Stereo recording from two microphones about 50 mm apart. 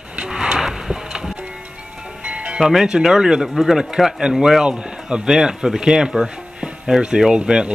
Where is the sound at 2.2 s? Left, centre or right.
Centre.